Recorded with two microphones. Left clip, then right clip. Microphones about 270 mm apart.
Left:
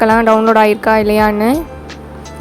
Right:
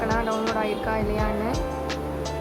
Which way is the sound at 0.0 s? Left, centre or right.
Left.